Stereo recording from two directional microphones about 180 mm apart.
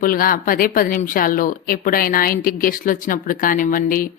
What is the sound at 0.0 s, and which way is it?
A woman's voice, 50° left (ahead or behind).